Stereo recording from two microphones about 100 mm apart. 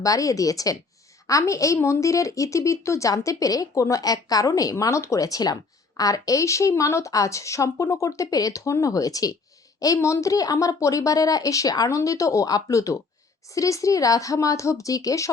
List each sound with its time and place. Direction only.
0.0 s speech: 35° left (ahead or behind)